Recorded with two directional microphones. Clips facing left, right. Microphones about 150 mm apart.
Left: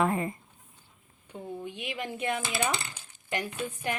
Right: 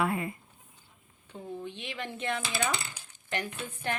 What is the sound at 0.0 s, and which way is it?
Speech, 40° left (ahead or behind).